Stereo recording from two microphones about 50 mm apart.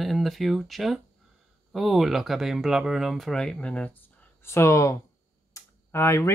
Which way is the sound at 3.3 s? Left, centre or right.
Centre.